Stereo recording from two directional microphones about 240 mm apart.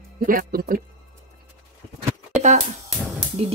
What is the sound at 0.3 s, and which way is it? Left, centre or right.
Speech, right.